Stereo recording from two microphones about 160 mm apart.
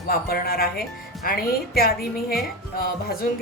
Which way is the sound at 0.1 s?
70° left (ahead or behind).